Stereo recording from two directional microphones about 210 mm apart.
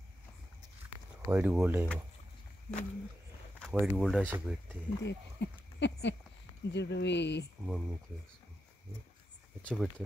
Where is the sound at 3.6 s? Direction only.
5° left (ahead or behind).